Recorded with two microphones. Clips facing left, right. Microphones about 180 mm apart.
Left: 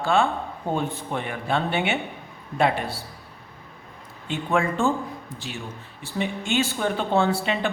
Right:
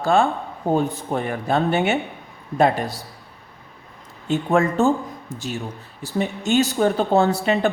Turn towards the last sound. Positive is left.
turn(degrees=-45)  # may be behind; listen again after turning